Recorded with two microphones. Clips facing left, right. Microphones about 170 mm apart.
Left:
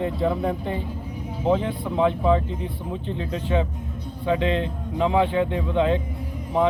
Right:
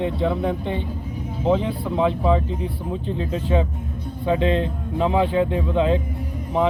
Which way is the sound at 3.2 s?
35° right (ahead or behind).